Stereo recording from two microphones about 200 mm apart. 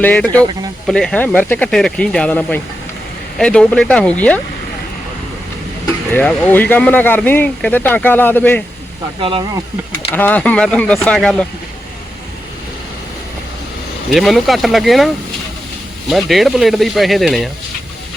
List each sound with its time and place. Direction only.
0.0 s speech: 5° left (ahead or behind)
6.1 s speech: 10° left (ahead or behind)
9.2 s speech: 25° right (ahead or behind)
10.1 s speech: 10° left (ahead or behind)
14.1 s speech: centre (ahead or behind)